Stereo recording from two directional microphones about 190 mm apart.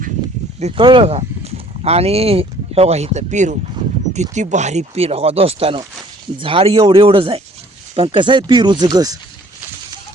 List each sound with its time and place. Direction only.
0.6 s speech: 25° right (ahead or behind)